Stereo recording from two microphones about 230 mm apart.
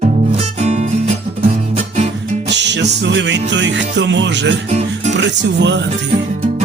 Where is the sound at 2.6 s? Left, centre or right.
Right.